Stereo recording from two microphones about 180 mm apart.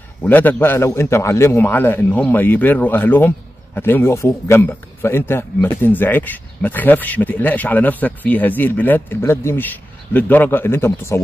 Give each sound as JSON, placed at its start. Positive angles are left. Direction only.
{"t": 0.2, "sound": "speech", "side_deg": 10}